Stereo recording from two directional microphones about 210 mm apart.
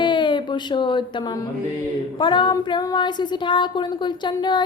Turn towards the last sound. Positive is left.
turn(degrees=20)  # may be behind; listen again after turning